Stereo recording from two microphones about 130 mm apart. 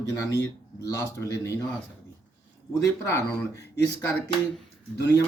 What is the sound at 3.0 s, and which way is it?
Speech, 20° left (ahead or behind).